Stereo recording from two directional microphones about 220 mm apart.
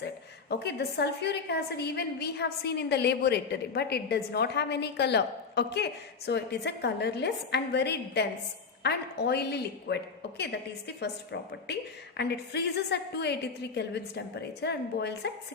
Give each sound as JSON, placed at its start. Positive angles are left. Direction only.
{"t": 0.5, "sound": "a woman's voice", "side_deg": 45}